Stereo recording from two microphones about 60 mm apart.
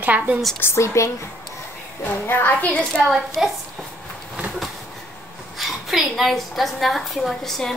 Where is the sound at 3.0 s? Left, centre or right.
Centre.